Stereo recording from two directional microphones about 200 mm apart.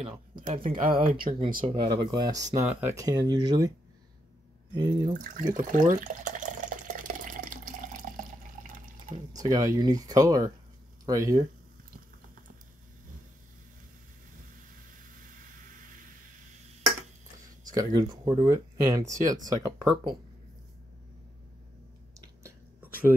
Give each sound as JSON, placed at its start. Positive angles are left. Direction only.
{"t": 0.6, "sound": "speech", "side_deg": -45}
{"t": 1.1, "sound": "speech", "side_deg": -25}
{"t": 2.6, "sound": "speech", "side_deg": -5}
{"t": 2.9, "sound": "speech", "side_deg": -15}
{"t": 4.7, "sound": "speech", "side_deg": -20}
{"t": 5.7, "sound": "water", "side_deg": -40}
{"t": 9.1, "sound": "speech", "side_deg": -40}
{"t": 9.4, "sound": "speech", "side_deg": -15}
{"t": 17.6, "sound": "speech", "side_deg": -20}
{"t": 22.4, "sound": "whispering", "side_deg": -10}